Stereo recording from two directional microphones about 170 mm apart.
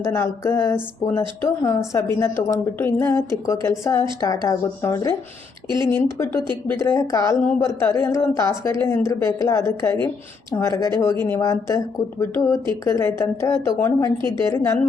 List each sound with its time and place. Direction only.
0.1 s speech: 15° left (ahead or behind)